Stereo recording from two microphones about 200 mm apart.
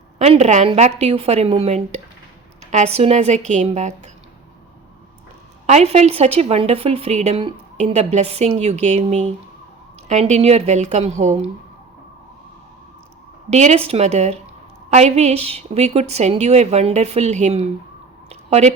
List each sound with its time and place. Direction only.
0.2 s a woman's voice: 35° right (ahead or behind)
5.6 s a woman's voice: 35° right (ahead or behind)
13.5 s a woman's voice: 35° right (ahead or behind)
18.3 s a sound: 30° right (ahead or behind)